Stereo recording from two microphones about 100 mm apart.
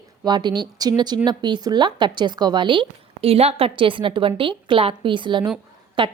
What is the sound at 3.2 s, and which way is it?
A woman's voice, 85° right.